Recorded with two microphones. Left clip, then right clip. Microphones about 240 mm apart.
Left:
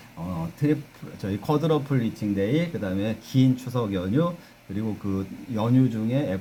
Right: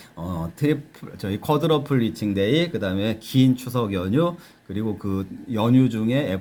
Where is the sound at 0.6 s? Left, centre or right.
Centre.